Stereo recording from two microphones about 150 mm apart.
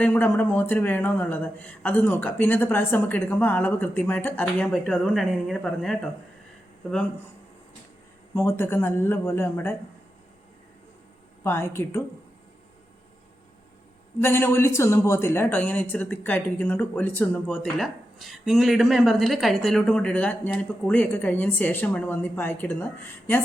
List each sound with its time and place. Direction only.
0.0 s a man's voice: 10° left (ahead or behind)
8.4 s a man's voice: 15° left (ahead or behind)
11.4 s a man's voice: 15° left (ahead or behind)
14.2 s a man's voice: 15° left (ahead or behind)